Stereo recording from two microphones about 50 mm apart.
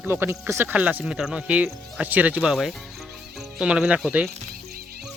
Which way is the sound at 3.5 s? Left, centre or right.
Centre.